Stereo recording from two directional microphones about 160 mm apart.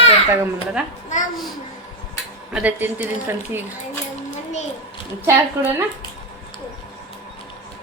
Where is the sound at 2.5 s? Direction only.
10° right (ahead or behind).